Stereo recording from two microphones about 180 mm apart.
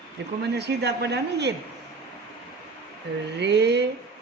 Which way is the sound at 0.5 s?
70° right (ahead or behind).